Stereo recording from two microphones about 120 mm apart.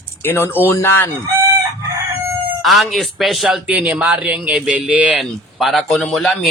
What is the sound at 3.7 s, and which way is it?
A man's voice, 10° right (ahead or behind).